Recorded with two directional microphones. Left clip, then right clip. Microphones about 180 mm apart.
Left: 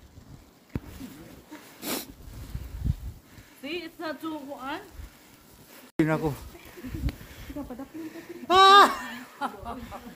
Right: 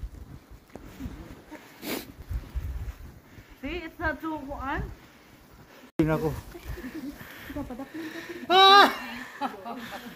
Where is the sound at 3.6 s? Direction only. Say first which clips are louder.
Right 3 dB; 35° left (ahead or behind).